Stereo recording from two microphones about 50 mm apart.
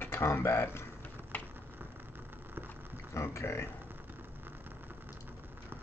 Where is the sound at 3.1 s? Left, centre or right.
Left.